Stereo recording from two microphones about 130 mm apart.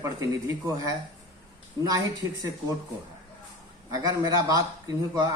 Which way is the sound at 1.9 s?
25° right (ahead or behind).